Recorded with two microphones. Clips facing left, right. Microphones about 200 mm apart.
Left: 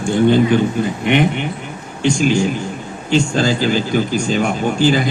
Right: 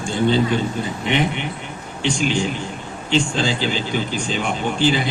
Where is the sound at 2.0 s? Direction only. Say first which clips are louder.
Left 6 dB; 45° left (ahead or behind).